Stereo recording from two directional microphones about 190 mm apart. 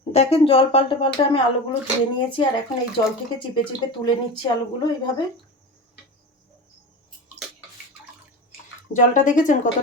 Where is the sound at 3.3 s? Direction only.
25° left (ahead or behind).